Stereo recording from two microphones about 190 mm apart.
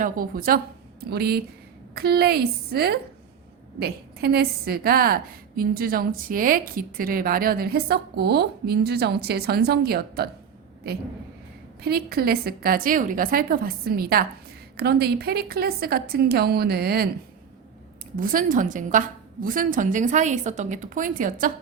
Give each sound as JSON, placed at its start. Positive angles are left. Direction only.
{"t": 0.0, "sound": "a woman's voice", "side_deg": -50}
{"t": 11.8, "sound": "a woman's voice", "side_deg": -55}
{"t": 18.2, "sound": "a woman's voice", "side_deg": -45}